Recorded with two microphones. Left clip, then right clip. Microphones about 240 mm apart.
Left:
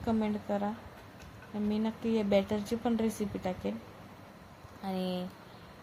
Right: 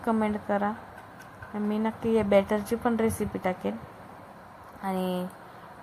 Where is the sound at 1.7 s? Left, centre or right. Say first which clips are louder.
Right 7 dB; centre.